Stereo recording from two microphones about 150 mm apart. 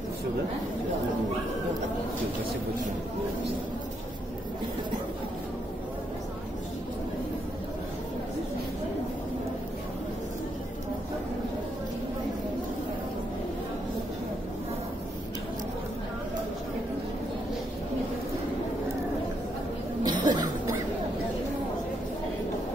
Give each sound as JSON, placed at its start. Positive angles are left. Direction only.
{"t": 20.1, "sound": "cough", "side_deg": -25}